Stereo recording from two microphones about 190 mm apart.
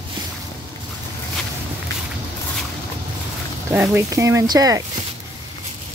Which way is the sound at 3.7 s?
10° right (ahead or behind).